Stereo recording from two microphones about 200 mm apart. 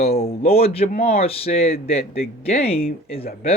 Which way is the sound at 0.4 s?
30° left (ahead or behind).